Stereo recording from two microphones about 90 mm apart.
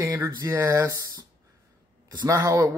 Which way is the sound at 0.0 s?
35° right (ahead or behind).